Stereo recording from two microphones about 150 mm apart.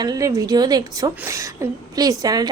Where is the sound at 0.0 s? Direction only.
25° right (ahead or behind).